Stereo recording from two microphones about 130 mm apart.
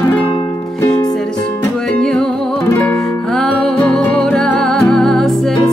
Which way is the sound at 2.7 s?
20° left (ahead or behind).